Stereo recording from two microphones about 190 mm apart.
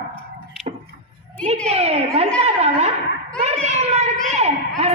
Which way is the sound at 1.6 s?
35° right (ahead or behind).